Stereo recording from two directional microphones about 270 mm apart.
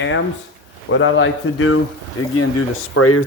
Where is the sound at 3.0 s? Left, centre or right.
Left.